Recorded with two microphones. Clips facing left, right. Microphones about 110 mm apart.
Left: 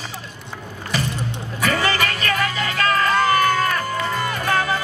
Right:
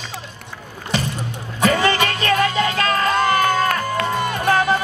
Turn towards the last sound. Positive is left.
turn(degrees=-30)  # may be behind; listen again after turning